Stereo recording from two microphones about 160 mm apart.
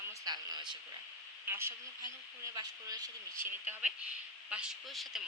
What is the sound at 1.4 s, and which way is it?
Speech, 15° right (ahead or behind).